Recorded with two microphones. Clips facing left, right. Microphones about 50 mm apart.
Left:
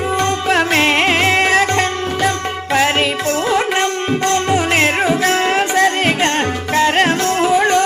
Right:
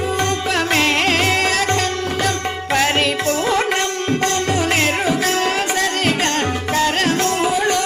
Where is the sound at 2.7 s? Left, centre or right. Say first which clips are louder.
Left 2 dB; centre.